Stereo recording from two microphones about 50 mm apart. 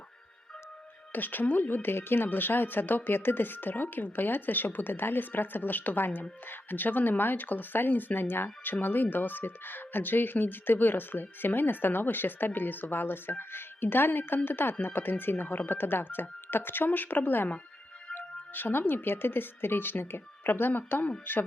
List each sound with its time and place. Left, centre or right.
1.1 s speech: left